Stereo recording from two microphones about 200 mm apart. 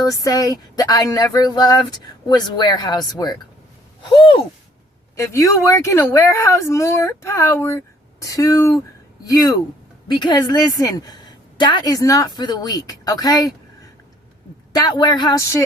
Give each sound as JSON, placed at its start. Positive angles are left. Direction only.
{"t": 0.0, "sound": "a woman's voice", "side_deg": 15}
{"t": 5.1, "sound": "speech", "side_deg": 15}
{"t": 10.1, "sound": "a woman's voice", "side_deg": 20}
{"t": 14.7, "sound": "a woman's voice", "side_deg": 20}